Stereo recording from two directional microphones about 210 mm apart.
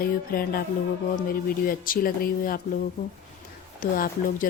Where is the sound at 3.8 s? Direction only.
40° left (ahead or behind).